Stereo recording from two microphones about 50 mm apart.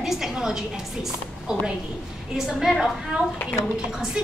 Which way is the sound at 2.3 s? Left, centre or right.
Centre.